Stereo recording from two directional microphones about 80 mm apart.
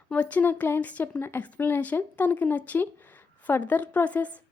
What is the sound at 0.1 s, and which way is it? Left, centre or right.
Speech, centre.